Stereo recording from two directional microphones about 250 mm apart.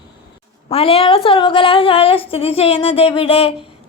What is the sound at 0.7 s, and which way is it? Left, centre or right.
A woman's voice, left.